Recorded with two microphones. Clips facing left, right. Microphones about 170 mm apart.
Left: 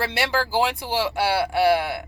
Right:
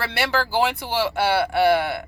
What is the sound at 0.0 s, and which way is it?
Speech, 15° left (ahead or behind).